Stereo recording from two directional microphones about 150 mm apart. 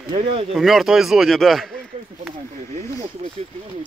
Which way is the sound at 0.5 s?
Centre (ahead or behind).